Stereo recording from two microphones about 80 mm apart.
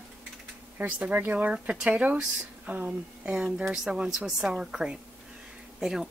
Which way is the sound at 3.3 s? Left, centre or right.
Centre.